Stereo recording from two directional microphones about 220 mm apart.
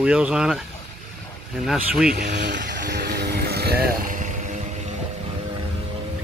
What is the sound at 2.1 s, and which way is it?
Speech, 45° right (ahead or behind).